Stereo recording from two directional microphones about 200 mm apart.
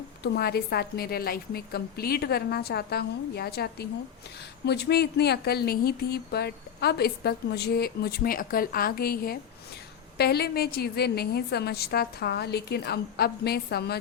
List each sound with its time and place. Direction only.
0.2 s speech: 50° left (ahead or behind)